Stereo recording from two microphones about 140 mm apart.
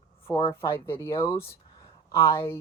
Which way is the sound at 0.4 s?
20° left (ahead or behind).